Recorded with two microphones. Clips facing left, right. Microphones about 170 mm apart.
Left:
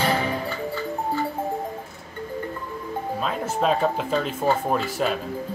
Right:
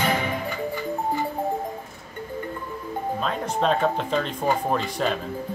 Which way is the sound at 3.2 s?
5° left (ahead or behind).